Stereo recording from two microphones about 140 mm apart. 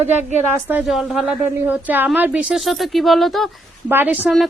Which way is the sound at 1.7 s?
10° right (ahead or behind).